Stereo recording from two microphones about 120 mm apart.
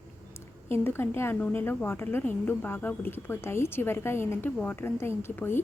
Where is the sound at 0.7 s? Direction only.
20° left (ahead or behind).